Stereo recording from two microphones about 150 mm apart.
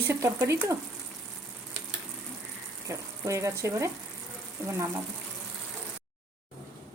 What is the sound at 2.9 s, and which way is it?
Speech, 20° right (ahead or behind).